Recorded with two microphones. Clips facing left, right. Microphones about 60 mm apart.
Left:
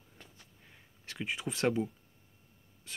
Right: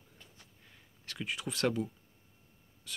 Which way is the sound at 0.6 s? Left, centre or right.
Centre.